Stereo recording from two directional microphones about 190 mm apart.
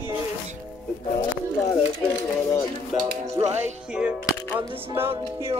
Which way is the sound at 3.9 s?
5° right (ahead or behind).